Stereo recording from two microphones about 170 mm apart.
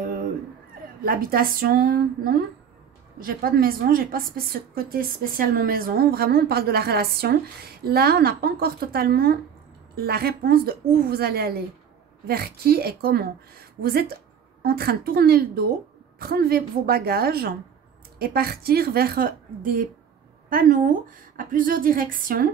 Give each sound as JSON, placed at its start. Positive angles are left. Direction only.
{"t": 1.0, "sound": "a woman's voice", "side_deg": -60}
{"t": 14.6, "sound": "a woman's voice", "side_deg": -65}